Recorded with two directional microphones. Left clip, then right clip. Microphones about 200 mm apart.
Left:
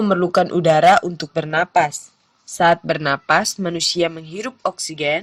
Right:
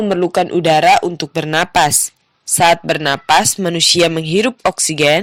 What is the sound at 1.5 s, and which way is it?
Speech, 45° right (ahead or behind).